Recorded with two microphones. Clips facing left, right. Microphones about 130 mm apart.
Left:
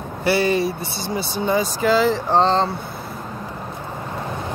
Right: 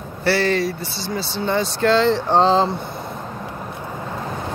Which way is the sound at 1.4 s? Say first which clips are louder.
Even; 5° left (ahead or behind).